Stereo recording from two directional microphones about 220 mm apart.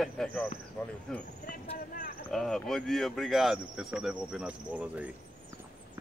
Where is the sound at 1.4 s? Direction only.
40° left (ahead or behind).